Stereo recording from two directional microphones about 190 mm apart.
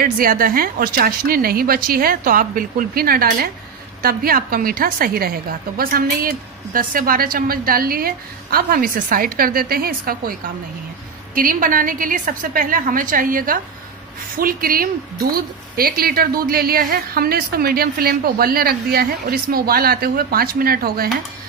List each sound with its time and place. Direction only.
0.0 s a woman's voice: 50° right (ahead or behind)
11.3 s a woman's voice: 45° right (ahead or behind)